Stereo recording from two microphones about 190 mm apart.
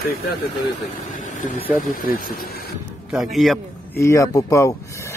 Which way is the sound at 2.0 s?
50° left (ahead or behind).